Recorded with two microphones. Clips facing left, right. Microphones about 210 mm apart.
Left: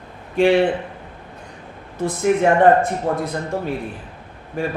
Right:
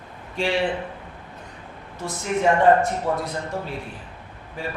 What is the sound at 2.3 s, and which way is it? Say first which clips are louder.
Speech: left 3 dB; 60° left (ahead or behind).